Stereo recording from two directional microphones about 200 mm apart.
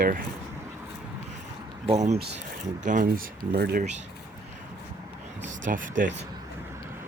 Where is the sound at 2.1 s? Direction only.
55° right (ahead or behind).